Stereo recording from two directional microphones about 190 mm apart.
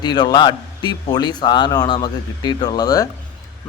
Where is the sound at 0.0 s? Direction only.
20° left (ahead or behind).